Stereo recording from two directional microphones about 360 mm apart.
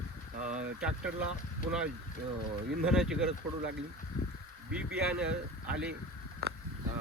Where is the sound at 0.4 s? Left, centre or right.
Centre.